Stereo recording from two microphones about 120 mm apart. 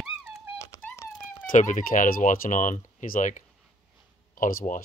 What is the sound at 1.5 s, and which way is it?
Speech, 90° left.